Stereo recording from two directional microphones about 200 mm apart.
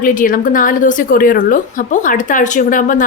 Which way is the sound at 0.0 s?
40° left (ahead or behind).